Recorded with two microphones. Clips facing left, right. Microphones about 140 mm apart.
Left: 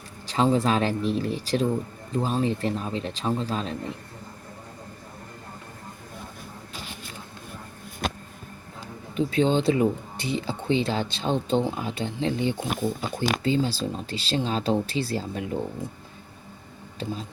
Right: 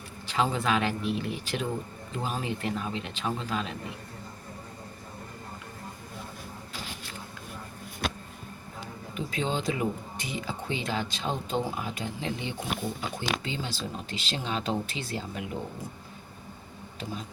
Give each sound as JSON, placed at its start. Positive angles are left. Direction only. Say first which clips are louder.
{"t": 0.3, "sound": "speech", "louder": "left 5 dB", "side_deg": 35}
{"t": 9.1, "sound": "speech", "louder": "left 9 dB", "side_deg": 30}